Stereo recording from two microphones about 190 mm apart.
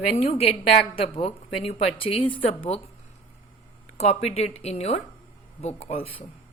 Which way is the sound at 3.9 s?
35° left (ahead or behind).